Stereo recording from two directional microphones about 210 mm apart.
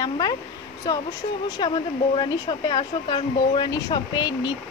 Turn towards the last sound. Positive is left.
turn(degrees=20)  # may be behind; listen again after turning